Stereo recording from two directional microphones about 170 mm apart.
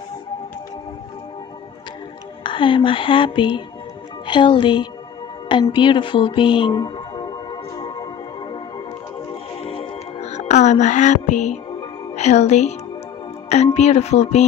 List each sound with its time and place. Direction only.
2.4 s music: 30° left (ahead or behind)
12.2 s speech: 40° left (ahead or behind)
13.7 s speech: 40° left (ahead or behind)